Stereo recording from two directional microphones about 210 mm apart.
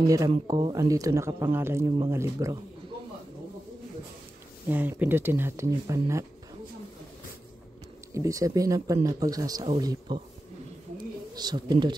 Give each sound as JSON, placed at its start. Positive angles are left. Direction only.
{"t": 0.0, "sound": "speech", "side_deg": -15}
{"t": 4.6, "sound": "speech", "side_deg": -10}
{"t": 8.1, "sound": "speech", "side_deg": -15}
{"t": 11.3, "sound": "speech", "side_deg": -20}